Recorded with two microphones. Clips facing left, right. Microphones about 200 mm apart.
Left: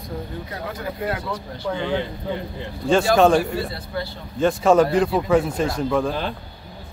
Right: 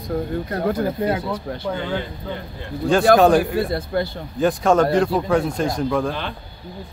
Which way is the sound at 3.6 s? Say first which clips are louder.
Right 6 dB; 50° right (ahead or behind).